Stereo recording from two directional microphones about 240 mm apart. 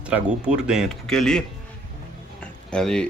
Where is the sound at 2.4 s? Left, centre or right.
Centre.